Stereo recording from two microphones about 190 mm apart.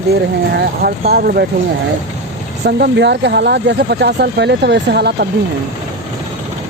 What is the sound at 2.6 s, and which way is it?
Speech, 60° right (ahead or behind).